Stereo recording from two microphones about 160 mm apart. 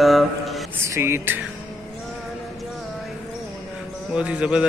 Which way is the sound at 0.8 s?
15° right (ahead or behind).